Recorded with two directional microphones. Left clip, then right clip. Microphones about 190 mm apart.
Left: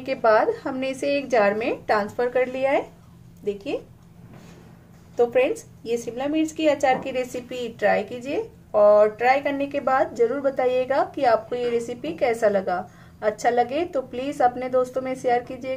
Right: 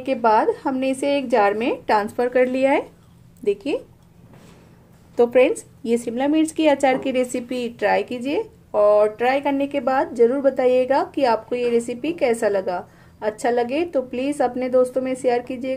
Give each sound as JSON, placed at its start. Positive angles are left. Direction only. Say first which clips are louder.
{"t": 0.0, "sound": "a woman's voice", "louder": "right 2 dB", "side_deg": -30}
{"t": 5.1, "sound": "a woman's voice", "louder": "right 4 dB", "side_deg": -40}